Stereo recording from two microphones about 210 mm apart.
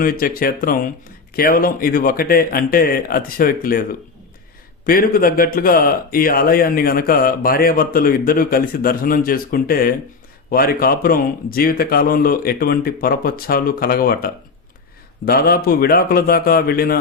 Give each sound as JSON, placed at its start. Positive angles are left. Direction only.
{"t": 0.0, "sound": "speech", "side_deg": 45}
{"t": 4.9, "sound": "speech", "side_deg": 45}